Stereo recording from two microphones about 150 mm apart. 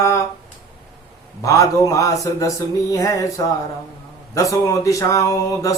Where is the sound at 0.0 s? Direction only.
20° left (ahead or behind).